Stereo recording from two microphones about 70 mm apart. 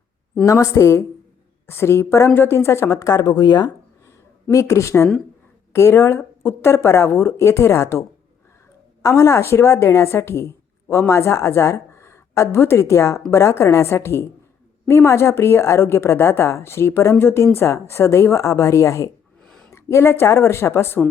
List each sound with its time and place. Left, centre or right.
0.4 s a woman's voice: left
3.2 s speech: left
4.5 s a woman's voice: left